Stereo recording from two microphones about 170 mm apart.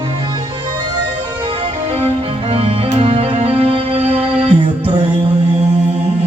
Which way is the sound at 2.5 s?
35° right (ahead or behind).